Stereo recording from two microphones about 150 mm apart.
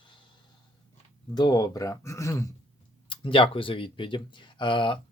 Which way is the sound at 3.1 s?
35° left (ahead or behind).